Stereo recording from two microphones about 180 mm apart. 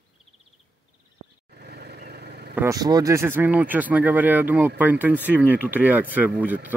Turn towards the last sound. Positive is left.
turn(degrees=-10)  # may be behind; listen again after turning